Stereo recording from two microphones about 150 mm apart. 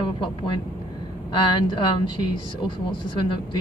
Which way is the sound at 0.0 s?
35° left (ahead or behind).